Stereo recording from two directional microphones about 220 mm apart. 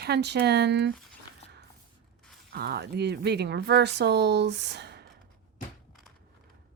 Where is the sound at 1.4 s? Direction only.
25° left (ahead or behind).